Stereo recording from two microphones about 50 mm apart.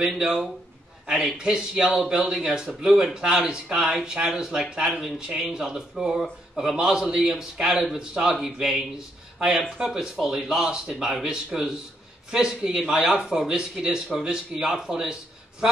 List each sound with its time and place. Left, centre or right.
0.0 s a man's voice: centre